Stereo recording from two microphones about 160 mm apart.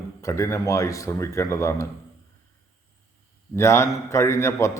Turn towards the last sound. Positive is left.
turn(degrees=15)  # may be behind; listen again after turning